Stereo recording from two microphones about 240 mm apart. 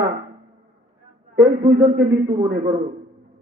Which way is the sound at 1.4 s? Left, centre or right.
Centre.